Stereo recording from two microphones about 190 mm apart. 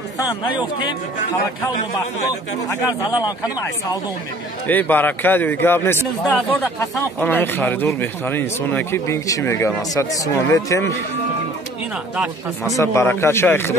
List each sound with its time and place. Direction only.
0.2 s speech: 25° left (ahead or behind)
2.9 s speech: 20° left (ahead or behind)
4.6 s a man's voice: 10° left (ahead or behind)
12.7 s a man's voice: 15° left (ahead or behind)